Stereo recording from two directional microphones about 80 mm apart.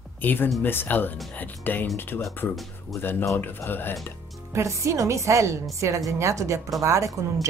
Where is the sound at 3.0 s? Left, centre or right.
Left.